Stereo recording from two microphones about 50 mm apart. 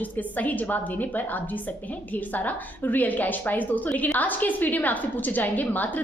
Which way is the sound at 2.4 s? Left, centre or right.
Left.